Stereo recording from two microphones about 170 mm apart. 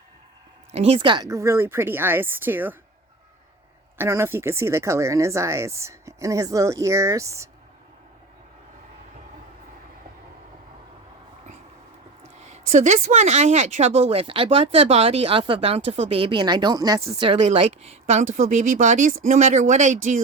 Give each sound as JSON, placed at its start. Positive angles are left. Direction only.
{"t": 0.7, "sound": "speech", "side_deg": -35}
{"t": 3.9, "sound": "speech", "side_deg": -15}
{"t": 12.4, "sound": "speech", "side_deg": -40}
{"t": 17.2, "sound": "speech", "side_deg": -35}